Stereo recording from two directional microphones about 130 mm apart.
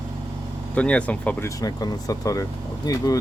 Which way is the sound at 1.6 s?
30° left (ahead or behind).